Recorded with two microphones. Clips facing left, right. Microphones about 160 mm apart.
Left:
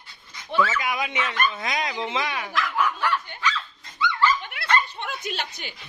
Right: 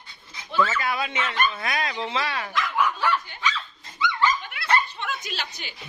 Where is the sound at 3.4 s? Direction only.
15° right (ahead or behind).